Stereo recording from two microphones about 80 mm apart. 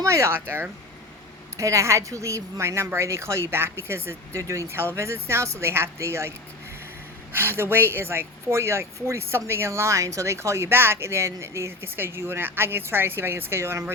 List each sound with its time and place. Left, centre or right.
0.0 s speech: right
1.5 s speech: right
7.3 s speech: right